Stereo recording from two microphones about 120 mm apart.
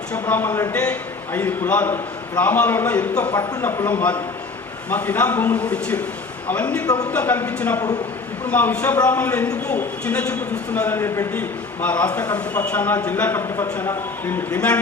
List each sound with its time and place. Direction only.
0.1 s a man's voice: 15° left (ahead or behind)
6.8 s speech: 30° left (ahead or behind)
7.1 s a man's voice: 15° left (ahead or behind)
11.3 s a man's voice: 10° left (ahead or behind)